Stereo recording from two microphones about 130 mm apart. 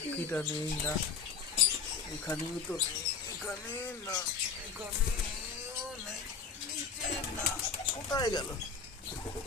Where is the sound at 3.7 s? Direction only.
15° left (ahead or behind).